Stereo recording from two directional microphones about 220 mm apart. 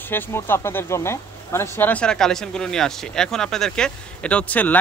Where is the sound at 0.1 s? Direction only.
10° left (ahead or behind).